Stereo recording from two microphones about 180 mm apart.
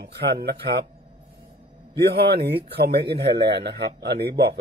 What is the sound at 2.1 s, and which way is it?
Speech, 65° right (ahead or behind).